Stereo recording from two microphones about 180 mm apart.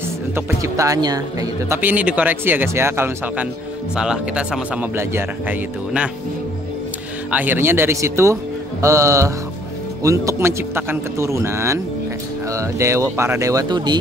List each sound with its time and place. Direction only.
0.6 s speech: 20° right (ahead or behind)
7.2 s speech: 10° right (ahead or behind)